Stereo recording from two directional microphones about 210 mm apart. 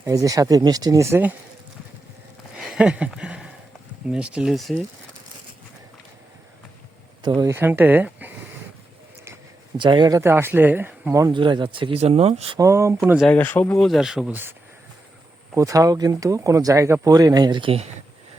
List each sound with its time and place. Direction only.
0.0 s speech: 15° right (ahead or behind)
2.6 s a sound: 5° right (ahead or behind)
4.1 s speech: 5° right (ahead or behind)
7.2 s speech: 15° right (ahead or behind)
9.7 s speech: 20° right (ahead or behind)
12.5 s speech: 15° right (ahead or behind)
13.2 s speech: 10° left (ahead or behind); by 14.5 s 10° right (ahead or behind)
15.5 s speech: 15° right (ahead or behind)